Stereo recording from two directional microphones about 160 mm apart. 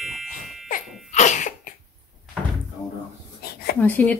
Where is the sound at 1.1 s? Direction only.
50° left (ahead or behind).